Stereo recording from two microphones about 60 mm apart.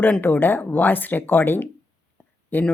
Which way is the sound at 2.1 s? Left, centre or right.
Left.